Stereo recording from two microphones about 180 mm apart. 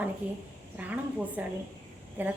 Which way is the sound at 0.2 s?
10° right (ahead or behind).